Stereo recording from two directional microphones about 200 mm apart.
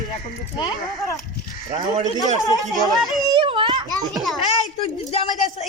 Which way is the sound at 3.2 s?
25° right (ahead or behind).